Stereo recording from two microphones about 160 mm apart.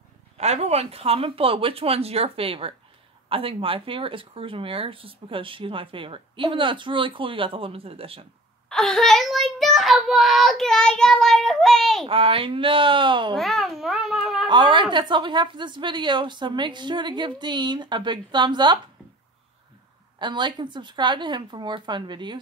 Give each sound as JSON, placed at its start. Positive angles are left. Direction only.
{"t": 0.4, "sound": "speech", "side_deg": -40}
{"t": 8.6, "sound": "child singing", "side_deg": 5}
{"t": 12.1, "sound": "speech", "side_deg": -35}
{"t": 13.4, "sound": "speech", "side_deg": 0}
{"t": 14.5, "sound": "a woman's voice", "side_deg": -30}
{"t": 20.2, "sound": "a woman's voice", "side_deg": -30}